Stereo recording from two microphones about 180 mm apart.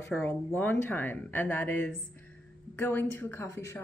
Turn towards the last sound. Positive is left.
turn(degrees=15)  # may be behind; listen again after turning